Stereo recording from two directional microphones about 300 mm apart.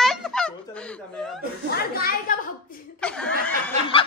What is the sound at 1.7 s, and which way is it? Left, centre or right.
Speech, left.